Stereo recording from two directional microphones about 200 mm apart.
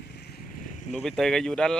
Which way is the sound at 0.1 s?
50° left (ahead or behind).